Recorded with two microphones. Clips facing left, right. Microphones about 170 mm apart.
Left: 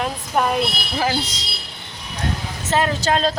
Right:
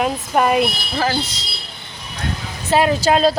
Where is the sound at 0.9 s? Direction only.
15° left (ahead or behind).